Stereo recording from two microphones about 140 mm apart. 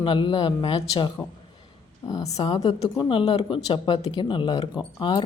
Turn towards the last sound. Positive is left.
turn(degrees=35)  # may be behind; listen again after turning